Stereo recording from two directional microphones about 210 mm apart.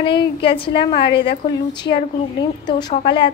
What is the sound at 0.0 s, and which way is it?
Speech, 25° left (ahead or behind).